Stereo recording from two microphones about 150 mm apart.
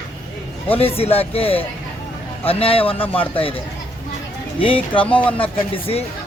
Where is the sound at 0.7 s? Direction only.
40° left (ahead or behind).